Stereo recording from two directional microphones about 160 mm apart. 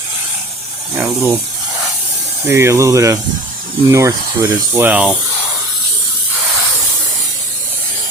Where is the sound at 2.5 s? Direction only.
15° right (ahead or behind).